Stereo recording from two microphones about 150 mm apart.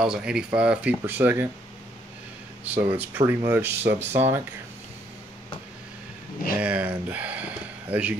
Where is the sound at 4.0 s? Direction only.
45° right (ahead or behind).